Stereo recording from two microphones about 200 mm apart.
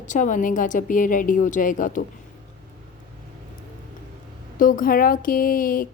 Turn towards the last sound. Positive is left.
turn(degrees=45)  # may be behind; listen again after turning